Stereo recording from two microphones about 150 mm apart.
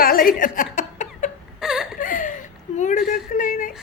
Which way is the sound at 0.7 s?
55° left (ahead or behind).